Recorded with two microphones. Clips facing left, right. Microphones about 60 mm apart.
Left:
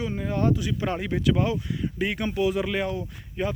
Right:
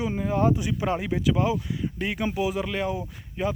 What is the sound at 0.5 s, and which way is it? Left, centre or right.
Speech, centre.